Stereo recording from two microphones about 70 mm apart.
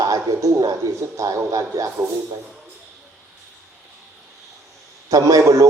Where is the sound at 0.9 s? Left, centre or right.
Right.